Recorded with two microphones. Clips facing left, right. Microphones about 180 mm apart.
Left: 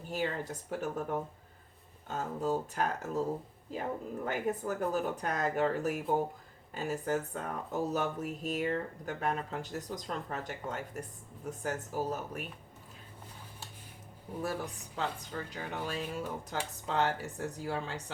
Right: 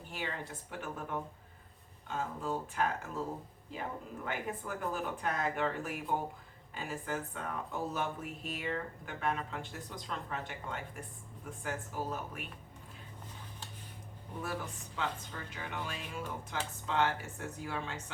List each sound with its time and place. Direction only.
0.1 s speech: 40° left (ahead or behind)
4.3 s speech: 40° left (ahead or behind)
14.9 s speech: 40° left (ahead or behind)